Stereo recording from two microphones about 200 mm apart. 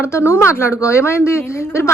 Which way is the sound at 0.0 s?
15° left (ahead or behind).